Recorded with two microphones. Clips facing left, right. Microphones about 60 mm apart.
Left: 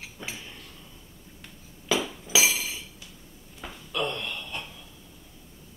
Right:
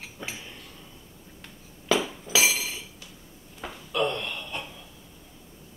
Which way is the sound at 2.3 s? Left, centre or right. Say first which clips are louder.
Right 1 dB; centre.